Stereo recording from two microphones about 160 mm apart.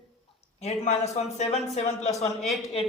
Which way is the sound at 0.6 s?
45° left (ahead or behind).